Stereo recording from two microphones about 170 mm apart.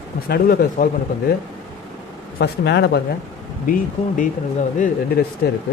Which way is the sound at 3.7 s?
50° left (ahead or behind).